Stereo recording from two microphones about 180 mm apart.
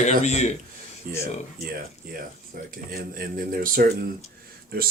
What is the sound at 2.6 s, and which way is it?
Speech, 50° right (ahead or behind).